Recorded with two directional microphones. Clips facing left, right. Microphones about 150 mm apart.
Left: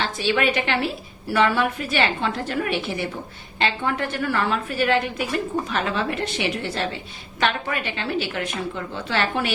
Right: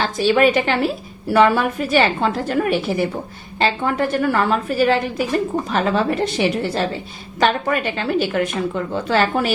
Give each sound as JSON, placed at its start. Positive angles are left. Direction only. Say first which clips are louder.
{"t": 0.0, "sound": "a woman's voice", "louder": "right 7 dB", "side_deg": -45}